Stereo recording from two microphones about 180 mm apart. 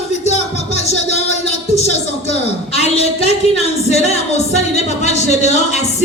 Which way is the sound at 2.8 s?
35° left (ahead or behind).